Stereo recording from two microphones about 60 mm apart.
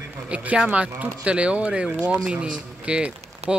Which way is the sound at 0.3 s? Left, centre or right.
Right.